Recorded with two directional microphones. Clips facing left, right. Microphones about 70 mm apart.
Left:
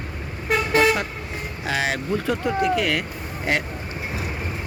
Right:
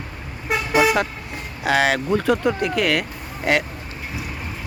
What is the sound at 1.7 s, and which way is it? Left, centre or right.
Speech, right.